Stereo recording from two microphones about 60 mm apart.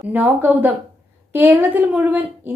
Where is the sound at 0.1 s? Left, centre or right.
Right.